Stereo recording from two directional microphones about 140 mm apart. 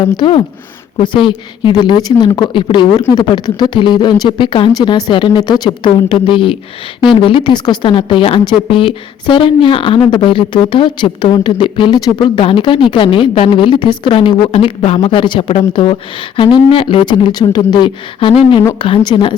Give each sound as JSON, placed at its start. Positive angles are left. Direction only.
{"t": 0.0, "sound": "speech", "side_deg": 35}